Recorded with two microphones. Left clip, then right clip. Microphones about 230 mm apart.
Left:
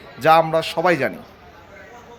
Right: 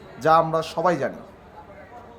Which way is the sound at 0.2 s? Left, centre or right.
Left.